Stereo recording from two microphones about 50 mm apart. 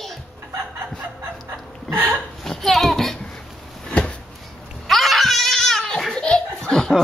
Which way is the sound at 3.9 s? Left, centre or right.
Left.